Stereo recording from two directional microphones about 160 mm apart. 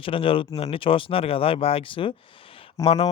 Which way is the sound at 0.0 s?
35° left (ahead or behind).